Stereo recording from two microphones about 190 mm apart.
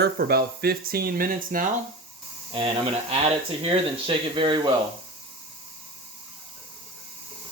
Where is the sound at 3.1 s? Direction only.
30° right (ahead or behind).